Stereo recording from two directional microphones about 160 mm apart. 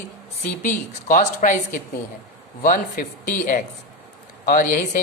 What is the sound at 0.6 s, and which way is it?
Speech, 55° left (ahead or behind).